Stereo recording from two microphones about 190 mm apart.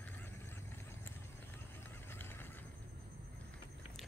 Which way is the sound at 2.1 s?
10° left (ahead or behind).